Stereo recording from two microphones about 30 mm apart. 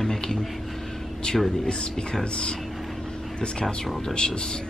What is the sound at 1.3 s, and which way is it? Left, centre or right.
A woman's voice, left.